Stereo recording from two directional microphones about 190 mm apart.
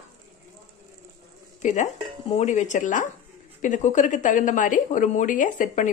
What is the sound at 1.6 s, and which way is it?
A woman's voice, 40° left (ahead or behind).